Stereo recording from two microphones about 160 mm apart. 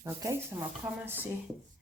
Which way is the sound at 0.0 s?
15° right (ahead or behind).